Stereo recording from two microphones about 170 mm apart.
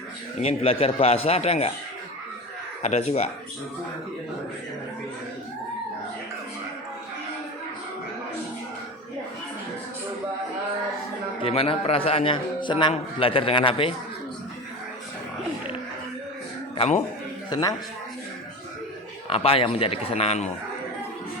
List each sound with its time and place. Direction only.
0.4 s a man's voice: 35° left (ahead or behind)
2.8 s a man's voice: 40° left (ahead or behind)
11.4 s a man's voice: 35° left (ahead or behind)
16.7 s speech: 35° left (ahead or behind)
17.5 s a man's voice: 20° left (ahead or behind)
19.3 s a man's voice: 35° left (ahead or behind)